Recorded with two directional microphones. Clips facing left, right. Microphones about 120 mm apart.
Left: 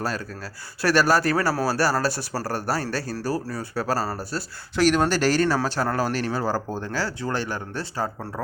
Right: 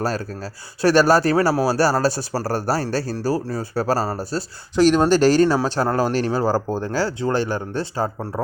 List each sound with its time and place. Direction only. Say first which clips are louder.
0.8 s speech: right 5 dB; 30° right (ahead or behind)